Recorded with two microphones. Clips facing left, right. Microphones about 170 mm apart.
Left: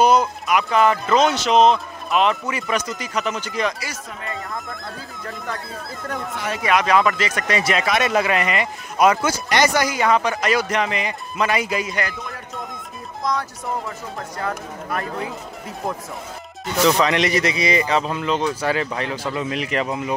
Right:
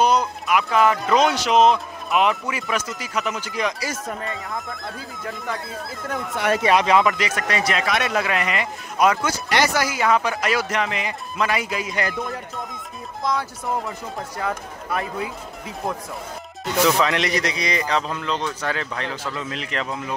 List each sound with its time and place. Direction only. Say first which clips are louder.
0.0 s speech: left 3 dB; 5° left (ahead or behind)
6.3 s speech: right 10 dB; 60° right (ahead or behind)
6.6 s speech: left 1 dB; 25° right (ahead or behind)
7.3 s speech: left 2 dB; centre (ahead or behind)
13.2 s speech: even; centre (ahead or behind)
17.0 s a man's voice: left 3 dB; centre (ahead or behind)